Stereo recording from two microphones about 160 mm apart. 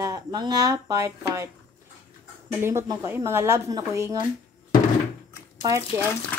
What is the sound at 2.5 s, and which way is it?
Speech, 15° right (ahead or behind).